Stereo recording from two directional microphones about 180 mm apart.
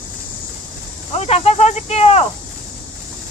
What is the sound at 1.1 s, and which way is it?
Speech, 35° left (ahead or behind).